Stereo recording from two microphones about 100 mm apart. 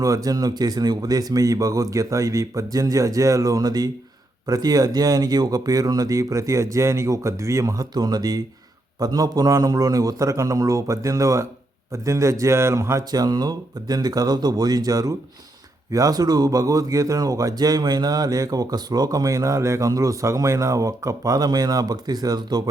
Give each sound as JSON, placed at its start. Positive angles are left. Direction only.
{"t": 0.0, "sound": "speech", "side_deg": -35}